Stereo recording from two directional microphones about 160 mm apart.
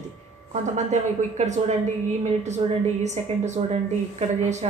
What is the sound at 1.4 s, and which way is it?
Speech, 45° right (ahead or behind).